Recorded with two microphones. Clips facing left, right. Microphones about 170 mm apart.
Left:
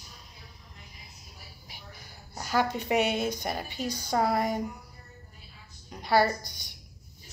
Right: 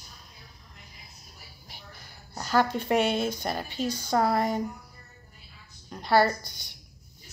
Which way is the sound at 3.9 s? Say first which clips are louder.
Right 2 dB; 50° right (ahead or behind).